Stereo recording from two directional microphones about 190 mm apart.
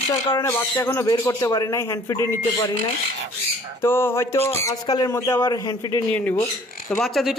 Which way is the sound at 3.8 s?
10° left (ahead or behind).